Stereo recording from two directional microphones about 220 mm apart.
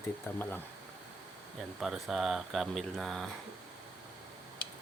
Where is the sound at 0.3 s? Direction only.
10° left (ahead or behind).